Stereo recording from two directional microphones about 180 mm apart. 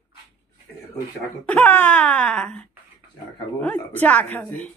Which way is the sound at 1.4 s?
10° left (ahead or behind).